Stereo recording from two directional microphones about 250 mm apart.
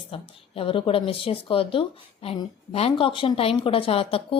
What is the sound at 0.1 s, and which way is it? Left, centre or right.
A woman's voice, left.